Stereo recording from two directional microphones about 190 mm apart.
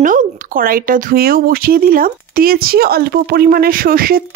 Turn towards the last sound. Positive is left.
turn(degrees=-50)  # may be behind; listen again after turning